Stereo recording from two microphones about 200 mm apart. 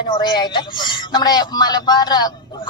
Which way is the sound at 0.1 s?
20° left (ahead or behind).